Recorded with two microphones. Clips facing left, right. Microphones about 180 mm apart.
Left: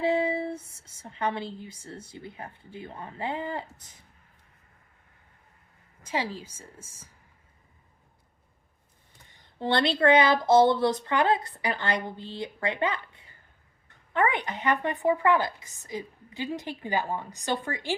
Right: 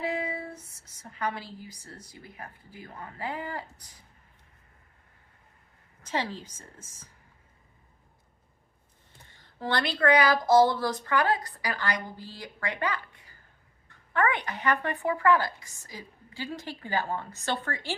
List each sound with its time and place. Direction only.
0.0 s speech: 30° left (ahead or behind)
6.0 s a woman's voice: 10° left (ahead or behind)
9.3 s speech: 20° left (ahead or behind)